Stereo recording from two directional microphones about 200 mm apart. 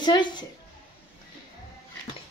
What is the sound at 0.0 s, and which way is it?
Speech, 20° left (ahead or behind).